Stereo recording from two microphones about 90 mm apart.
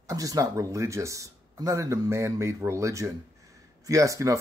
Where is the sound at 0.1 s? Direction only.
40° right (ahead or behind).